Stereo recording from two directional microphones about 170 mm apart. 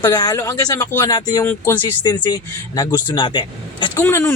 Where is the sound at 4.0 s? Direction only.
15° left (ahead or behind).